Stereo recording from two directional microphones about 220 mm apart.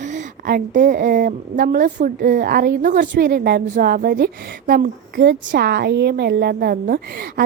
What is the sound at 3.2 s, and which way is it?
A woman's voice, 45° right (ahead or behind).